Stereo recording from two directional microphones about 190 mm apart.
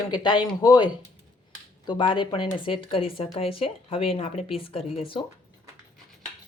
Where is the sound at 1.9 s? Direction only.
25° left (ahead or behind).